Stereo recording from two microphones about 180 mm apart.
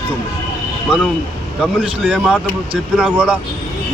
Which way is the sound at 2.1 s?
Centre (ahead or behind).